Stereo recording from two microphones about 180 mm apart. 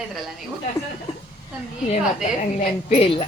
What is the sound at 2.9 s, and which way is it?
Speech, 30° left (ahead or behind).